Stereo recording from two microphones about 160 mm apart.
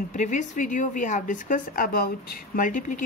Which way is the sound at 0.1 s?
50° left (ahead or behind).